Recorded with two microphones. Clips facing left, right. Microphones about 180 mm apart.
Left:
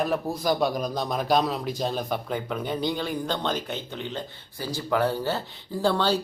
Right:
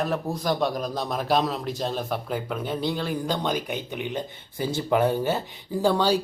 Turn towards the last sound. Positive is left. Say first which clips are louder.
# right 2 dB
turn(degrees=-10)  # may be behind; listen again after turning